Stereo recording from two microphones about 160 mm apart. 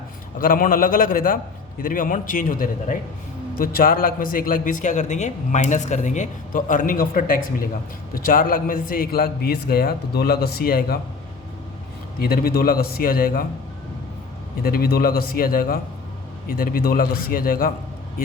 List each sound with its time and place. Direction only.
0.3 s a man's voice: 60° left (ahead or behind)
12.2 s a man's voice: 70° left (ahead or behind)
14.6 s a man's voice: 70° left (ahead or behind)